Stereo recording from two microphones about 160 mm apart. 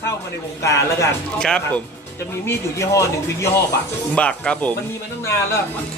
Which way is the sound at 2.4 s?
20° left (ahead or behind).